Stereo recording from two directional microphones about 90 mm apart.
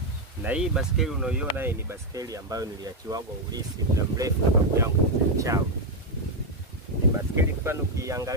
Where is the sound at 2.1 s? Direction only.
40° right (ahead or behind).